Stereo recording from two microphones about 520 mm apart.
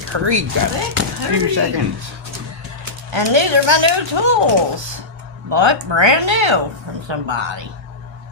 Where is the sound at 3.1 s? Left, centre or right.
Right.